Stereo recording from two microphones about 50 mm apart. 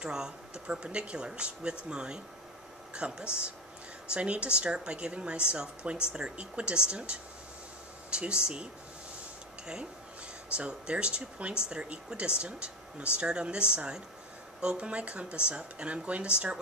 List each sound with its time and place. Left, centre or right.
0.0 s a woman's voice: centre
10.5 s a woman's voice: right